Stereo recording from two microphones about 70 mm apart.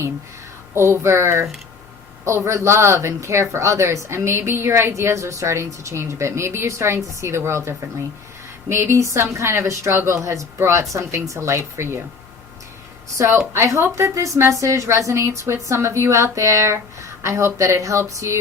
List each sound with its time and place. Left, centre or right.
0.7 s a woman's voice: right
13.1 s a woman's voice: right